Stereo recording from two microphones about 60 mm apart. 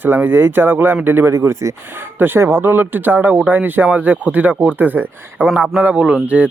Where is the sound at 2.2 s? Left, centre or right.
Right.